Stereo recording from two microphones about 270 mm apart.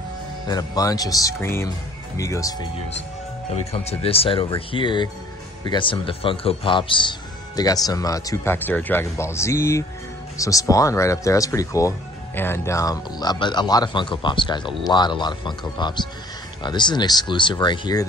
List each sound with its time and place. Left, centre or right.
0.5 s speech: centre
3.7 s speech: left